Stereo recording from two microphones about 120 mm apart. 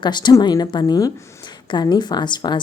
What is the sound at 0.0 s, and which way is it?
A woman's voice, 40° left (ahead or behind).